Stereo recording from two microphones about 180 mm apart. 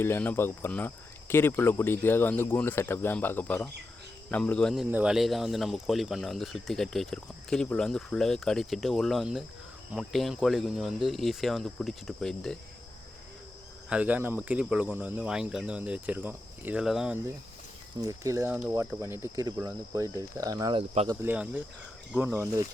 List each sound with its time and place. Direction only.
0.0 s speech: 10° left (ahead or behind)
13.9 s speech: 10° right (ahead or behind)
18.0 s speech: 20° right (ahead or behind)
21.1 s speech: 15° right (ahead or behind)